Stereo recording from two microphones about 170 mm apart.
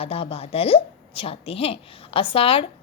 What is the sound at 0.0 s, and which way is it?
A woman's voice, 35° left (ahead or behind).